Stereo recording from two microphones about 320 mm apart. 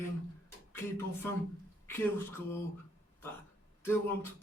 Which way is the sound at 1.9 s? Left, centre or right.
Centre.